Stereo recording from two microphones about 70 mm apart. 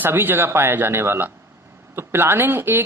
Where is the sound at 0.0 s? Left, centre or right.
Right.